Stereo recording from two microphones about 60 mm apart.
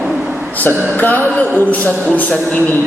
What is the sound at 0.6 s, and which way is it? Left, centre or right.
Speech, left.